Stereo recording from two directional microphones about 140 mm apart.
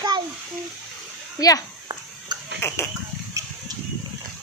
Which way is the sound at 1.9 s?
30° right (ahead or behind).